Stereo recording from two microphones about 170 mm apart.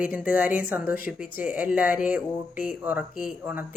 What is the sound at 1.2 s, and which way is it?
Speech, 10° right (ahead or behind).